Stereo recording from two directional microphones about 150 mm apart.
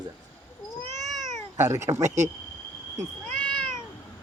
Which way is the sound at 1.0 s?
Centre (ahead or behind).